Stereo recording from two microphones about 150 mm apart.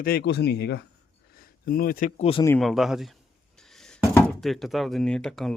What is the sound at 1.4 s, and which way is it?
Speech, 80° left.